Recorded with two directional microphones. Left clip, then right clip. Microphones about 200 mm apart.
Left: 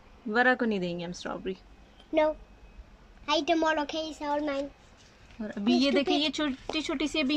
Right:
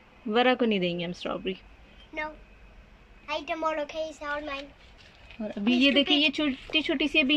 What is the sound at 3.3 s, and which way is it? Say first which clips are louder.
A woman's voice: left 4 dB; 50° left (ahead or behind).